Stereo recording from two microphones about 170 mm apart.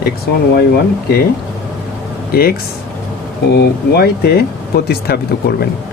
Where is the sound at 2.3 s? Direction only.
65° left (ahead or behind).